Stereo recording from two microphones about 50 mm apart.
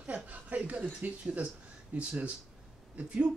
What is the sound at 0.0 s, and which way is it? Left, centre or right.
Speech, right.